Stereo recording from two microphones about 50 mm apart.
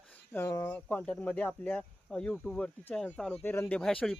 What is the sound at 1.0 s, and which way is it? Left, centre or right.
Speech, left.